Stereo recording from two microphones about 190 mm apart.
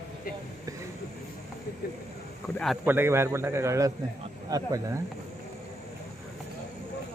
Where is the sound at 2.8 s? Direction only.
10° right (ahead or behind).